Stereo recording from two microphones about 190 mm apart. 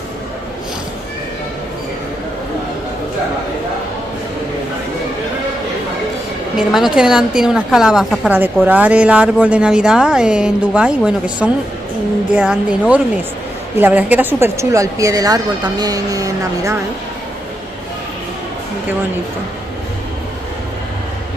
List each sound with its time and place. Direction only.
6.5 s a woman's voice: centre (ahead or behind); by 16.7 s 20° right (ahead or behind)